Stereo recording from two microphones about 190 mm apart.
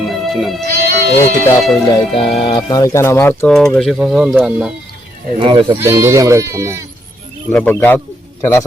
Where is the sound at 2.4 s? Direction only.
20° left (ahead or behind); by 4.7 s 5° right (ahead or behind).